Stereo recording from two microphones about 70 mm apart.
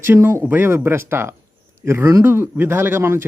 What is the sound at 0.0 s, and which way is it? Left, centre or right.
Speech, right.